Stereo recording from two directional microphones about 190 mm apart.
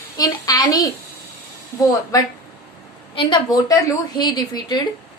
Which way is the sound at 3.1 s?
25° left (ahead or behind).